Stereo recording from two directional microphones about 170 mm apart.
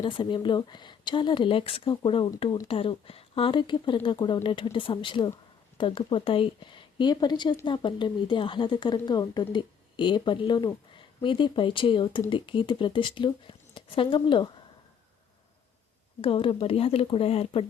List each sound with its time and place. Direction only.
0.0 s a woman's voice: 30° left (ahead or behind)
16.2 s speech: 30° left (ahead or behind)